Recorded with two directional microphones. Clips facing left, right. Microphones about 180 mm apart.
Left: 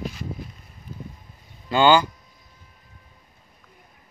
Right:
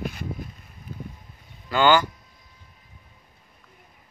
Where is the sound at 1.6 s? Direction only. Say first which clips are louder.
Left 2 dB; 20° left (ahead or behind).